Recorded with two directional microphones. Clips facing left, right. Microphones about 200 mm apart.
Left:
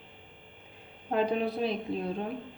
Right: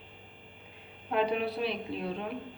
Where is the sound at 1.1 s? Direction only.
40° left (ahead or behind).